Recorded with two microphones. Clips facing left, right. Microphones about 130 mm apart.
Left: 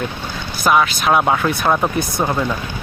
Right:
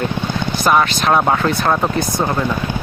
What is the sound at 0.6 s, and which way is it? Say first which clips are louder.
Speech: even; centre (ahead or behind).